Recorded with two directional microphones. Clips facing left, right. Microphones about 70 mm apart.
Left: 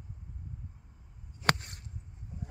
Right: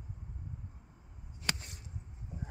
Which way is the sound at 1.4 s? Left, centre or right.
Left.